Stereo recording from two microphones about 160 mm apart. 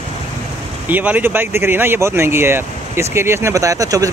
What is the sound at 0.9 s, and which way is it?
Speech, 10° right (ahead or behind).